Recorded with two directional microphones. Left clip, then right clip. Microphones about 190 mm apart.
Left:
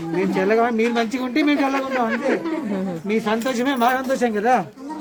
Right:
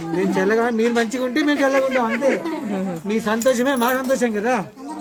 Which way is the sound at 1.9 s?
40° left (ahead or behind).